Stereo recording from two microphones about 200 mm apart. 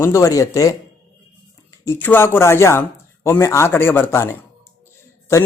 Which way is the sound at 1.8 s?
10° left (ahead or behind).